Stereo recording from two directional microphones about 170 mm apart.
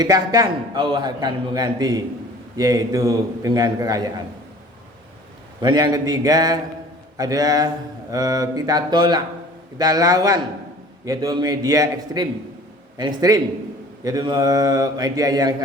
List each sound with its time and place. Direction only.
0.0 s a man's voice: 25° right (ahead or behind)
5.6 s a man's voice: 25° right (ahead or behind)